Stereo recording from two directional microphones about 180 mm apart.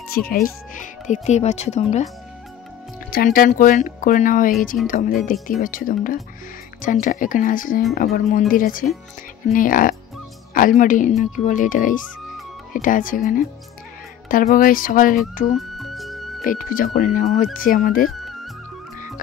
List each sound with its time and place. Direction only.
0.1 s speech: 55° left (ahead or behind); by 2.0 s 40° left (ahead or behind)
3.1 s speech: 55° left (ahead or behind)
15.5 s music: centre (ahead or behind)
16.4 s speech: 50° left (ahead or behind)
18.0 s music: centre (ahead or behind)